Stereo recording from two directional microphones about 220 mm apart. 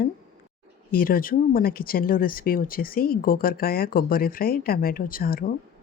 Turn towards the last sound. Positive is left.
turn(degrees=40)  # may be behind; listen again after turning